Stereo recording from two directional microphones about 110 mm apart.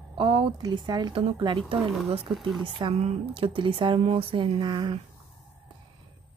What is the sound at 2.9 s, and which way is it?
Speech, 70° right (ahead or behind).